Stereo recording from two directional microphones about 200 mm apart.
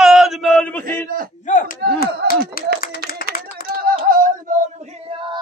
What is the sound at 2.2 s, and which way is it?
Clapping, 55° right (ahead or behind).